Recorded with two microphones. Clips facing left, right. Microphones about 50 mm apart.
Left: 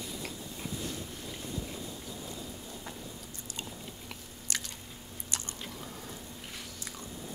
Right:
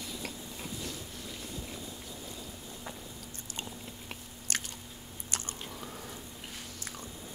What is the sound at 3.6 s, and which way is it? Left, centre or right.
Biting, right.